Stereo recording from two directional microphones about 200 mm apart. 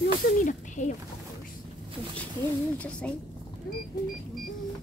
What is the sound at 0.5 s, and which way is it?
Speech, 35° left (ahead or behind).